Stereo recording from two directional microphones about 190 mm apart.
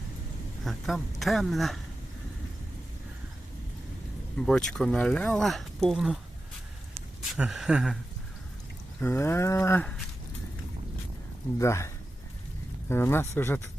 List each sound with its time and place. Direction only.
0.6 s speech: centre (ahead or behind)
4.4 s speech: 5° left (ahead or behind)
7.3 s speech: 5° right (ahead or behind)
9.0 s cattle: 15° left (ahead or behind)
11.6 s cattle: 15° left (ahead or behind)
12.9 s cattle: 10° left (ahead or behind)